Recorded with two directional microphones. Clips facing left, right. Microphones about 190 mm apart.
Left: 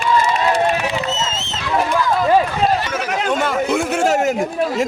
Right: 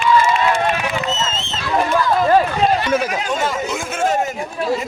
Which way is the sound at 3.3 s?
60° left (ahead or behind).